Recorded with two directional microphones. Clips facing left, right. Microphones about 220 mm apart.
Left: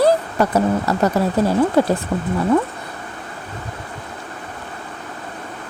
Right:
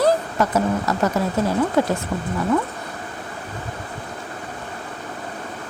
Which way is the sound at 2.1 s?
45° left (ahead or behind).